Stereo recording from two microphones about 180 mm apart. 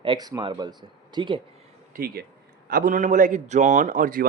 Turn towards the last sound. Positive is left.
turn(degrees=-50)  # may be behind; listen again after turning